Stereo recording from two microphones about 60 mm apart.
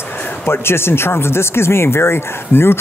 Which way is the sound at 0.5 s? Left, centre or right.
Left.